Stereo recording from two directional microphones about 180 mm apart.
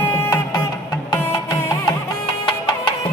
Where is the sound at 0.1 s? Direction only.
15° left (ahead or behind).